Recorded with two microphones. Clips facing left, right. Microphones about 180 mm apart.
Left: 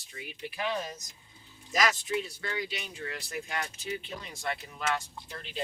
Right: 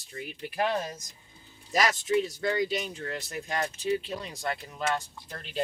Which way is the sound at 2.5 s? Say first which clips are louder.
Right 5 dB; 40° right (ahead or behind).